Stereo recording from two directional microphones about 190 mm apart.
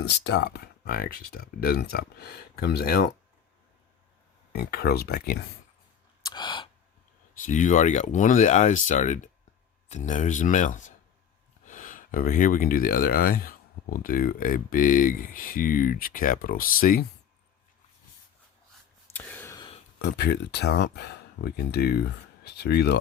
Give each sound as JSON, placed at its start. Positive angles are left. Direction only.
{"t": 0.3, "sound": "speech", "side_deg": 55}
{"t": 4.5, "sound": "speech", "side_deg": 55}
{"t": 6.2, "sound": "a sound", "side_deg": 25}
{"t": 7.4, "sound": "speech", "side_deg": 40}
{"t": 19.1, "sound": "a sound", "side_deg": 10}
{"t": 20.0, "sound": "speech", "side_deg": 60}